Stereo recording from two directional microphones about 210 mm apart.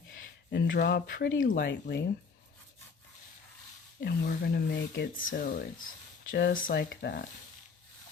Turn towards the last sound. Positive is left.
turn(degrees=50)  # may be behind; listen again after turning